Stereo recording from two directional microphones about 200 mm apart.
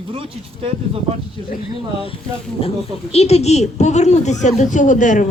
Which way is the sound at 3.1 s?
30° left (ahead or behind).